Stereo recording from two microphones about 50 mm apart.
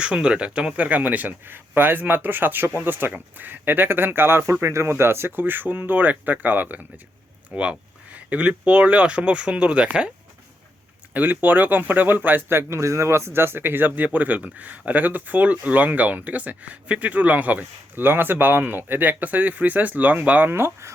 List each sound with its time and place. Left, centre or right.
0.0 s speech: right
0.9 s speech: right
4.6 s speech: right
5.4 s speech: right
7.5 s speech: right
11.1 s speech: right
12.6 s speech: right
18.0 s speech: right
20.5 s speech: right